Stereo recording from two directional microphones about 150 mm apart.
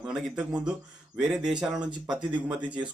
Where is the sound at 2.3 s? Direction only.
30° right (ahead or behind).